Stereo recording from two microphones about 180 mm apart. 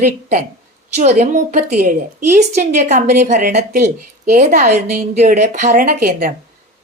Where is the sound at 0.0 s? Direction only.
45° right (ahead or behind).